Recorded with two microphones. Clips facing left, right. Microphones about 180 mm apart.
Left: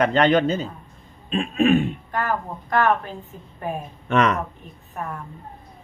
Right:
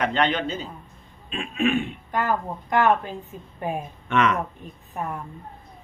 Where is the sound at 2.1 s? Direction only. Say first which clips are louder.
Right 2 dB; 15° right (ahead or behind).